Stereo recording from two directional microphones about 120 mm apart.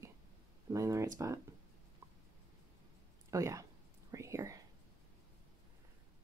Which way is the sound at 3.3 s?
25° right (ahead or behind).